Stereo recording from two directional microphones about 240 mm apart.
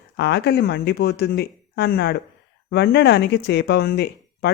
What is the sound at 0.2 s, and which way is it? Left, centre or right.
Speech, left.